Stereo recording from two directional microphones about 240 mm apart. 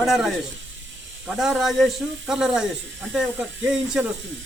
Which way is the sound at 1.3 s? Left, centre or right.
Centre.